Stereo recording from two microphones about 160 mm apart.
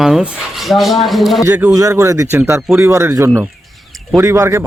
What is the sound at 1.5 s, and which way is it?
Speech, 10° right (ahead or behind).